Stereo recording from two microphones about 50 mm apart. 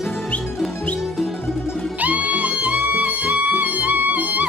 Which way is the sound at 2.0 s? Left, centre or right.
Right.